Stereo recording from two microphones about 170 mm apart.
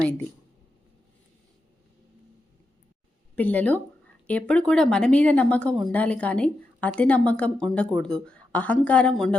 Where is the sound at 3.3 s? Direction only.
10° left (ahead or behind).